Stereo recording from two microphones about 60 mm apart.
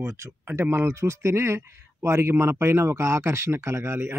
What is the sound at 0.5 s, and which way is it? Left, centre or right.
A man's voice, right.